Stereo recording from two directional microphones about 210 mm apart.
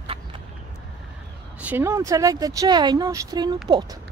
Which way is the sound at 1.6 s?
10° right (ahead or behind).